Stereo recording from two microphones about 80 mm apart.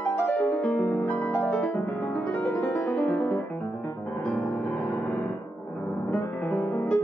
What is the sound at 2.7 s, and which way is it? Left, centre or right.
Music, centre.